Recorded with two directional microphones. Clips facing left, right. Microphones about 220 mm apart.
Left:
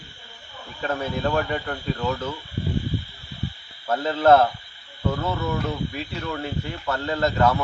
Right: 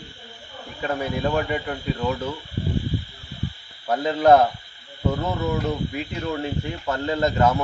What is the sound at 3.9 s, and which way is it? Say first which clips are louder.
Speech: right 1 dB; 15° right (ahead or behind).